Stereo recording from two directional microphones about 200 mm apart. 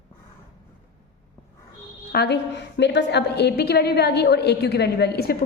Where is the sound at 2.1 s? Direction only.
55° left (ahead or behind).